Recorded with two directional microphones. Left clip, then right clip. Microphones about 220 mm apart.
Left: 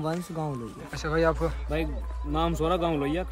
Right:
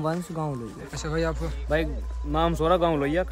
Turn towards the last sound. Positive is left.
turn(degrees=-5)  # may be behind; listen again after turning